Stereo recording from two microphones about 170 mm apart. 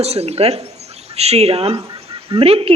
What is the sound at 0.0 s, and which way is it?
Speech, 40° right (ahead or behind).